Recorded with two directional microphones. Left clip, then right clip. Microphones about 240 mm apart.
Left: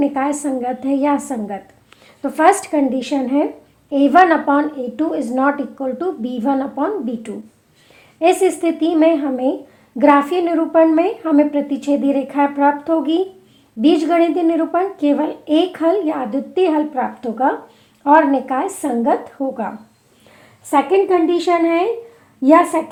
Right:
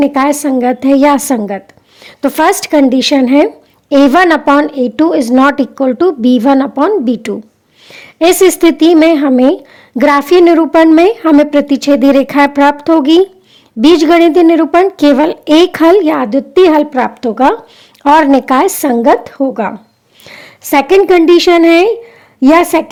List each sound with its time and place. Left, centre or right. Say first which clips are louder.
0.0 s a woman's voice: right 8 dB; right